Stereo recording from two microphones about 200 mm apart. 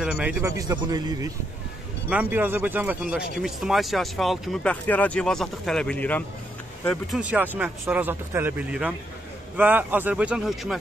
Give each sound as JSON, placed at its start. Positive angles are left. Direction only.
{"t": 0.0, "sound": "speech", "side_deg": -5}
{"t": 2.0, "sound": "speech", "side_deg": -10}
{"t": 7.2, "sound": "speech", "side_deg": -5}